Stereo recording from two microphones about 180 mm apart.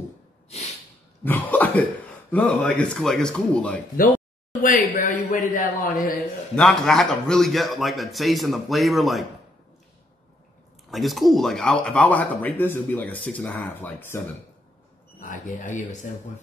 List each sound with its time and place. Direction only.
1.2 s cough: 10° left (ahead or behind)
2.3 s a man's voice: 5° left (ahead or behind)
4.6 s a man's voice: 45° left (ahead or behind)
6.5 s a man's voice: 5° left (ahead or behind)
10.9 s speech: centre (ahead or behind)
15.1 s a man's voice: 45° left (ahead or behind)